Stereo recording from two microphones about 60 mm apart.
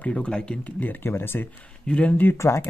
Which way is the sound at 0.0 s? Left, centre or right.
Centre.